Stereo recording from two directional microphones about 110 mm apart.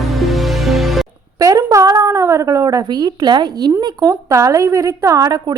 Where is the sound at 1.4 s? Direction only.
30° right (ahead or behind).